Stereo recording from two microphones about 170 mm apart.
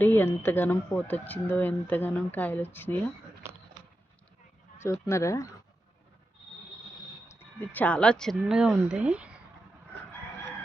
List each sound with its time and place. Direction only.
0.0 s speech: 10° left (ahead or behind)
4.8 s speech: 15° left (ahead or behind)
7.3 s speech: 10° left (ahead or behind); by 9.4 s 5° right (ahead or behind)